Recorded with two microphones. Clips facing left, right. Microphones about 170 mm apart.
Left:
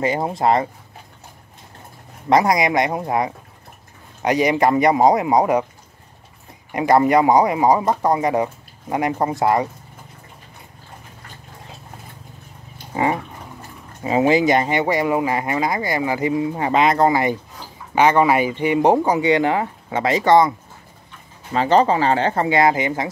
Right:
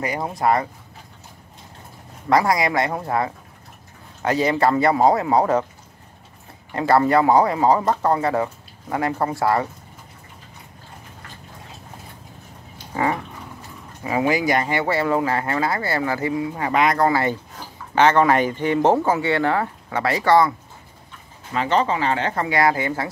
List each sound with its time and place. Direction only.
0.0 s speech: 25° left (ahead or behind)
2.2 s speech: 20° left (ahead or behind)
6.7 s speech: 15° left (ahead or behind)
12.9 s dog: 20° left (ahead or behind)
14.0 s speech: 25° left (ahead or behind)
21.5 s speech: 35° left (ahead or behind); by 23.0 s 20° left (ahead or behind)